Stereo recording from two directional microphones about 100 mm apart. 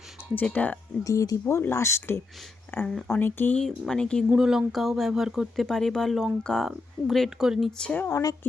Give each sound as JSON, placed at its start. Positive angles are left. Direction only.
{"t": 0.3, "sound": "speech", "side_deg": 15}
{"t": 1.0, "sound": "speech", "side_deg": 35}
{"t": 3.6, "sound": "speech", "side_deg": 5}
{"t": 4.3, "sound": "speech", "side_deg": -5}
{"t": 8.1, "sound": "speech", "side_deg": 35}